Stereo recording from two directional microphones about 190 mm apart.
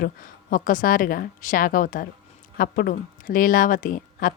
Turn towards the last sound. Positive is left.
turn(degrees=45)  # may be behind; listen again after turning